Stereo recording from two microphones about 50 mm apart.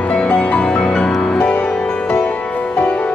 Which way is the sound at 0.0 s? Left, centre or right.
Left.